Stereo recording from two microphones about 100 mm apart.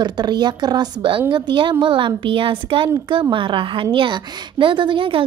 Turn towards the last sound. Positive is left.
turn(degrees=-55)  # may be behind; listen again after turning